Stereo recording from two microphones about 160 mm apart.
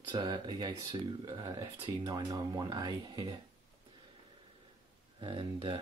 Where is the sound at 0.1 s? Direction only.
30° right (ahead or behind).